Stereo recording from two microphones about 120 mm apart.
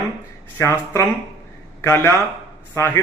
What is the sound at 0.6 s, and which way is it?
A man's voice, 25° left (ahead or behind).